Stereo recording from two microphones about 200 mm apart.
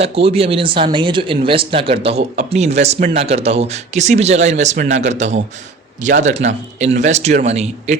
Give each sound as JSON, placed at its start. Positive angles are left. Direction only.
{"t": 0.0, "sound": "speech", "side_deg": -30}